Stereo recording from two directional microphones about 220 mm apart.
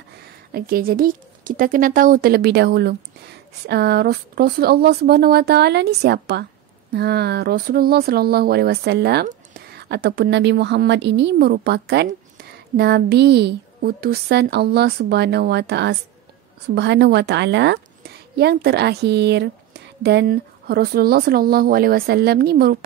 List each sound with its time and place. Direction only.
0.5 s speech: 45° right (ahead or behind)